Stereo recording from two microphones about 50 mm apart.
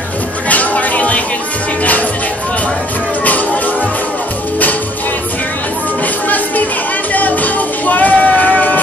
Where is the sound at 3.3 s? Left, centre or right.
Left.